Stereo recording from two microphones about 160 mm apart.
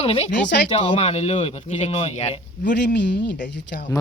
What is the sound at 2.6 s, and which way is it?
Speech, 90° left.